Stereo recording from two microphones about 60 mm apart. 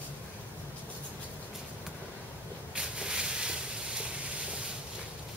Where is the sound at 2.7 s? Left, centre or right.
Centre.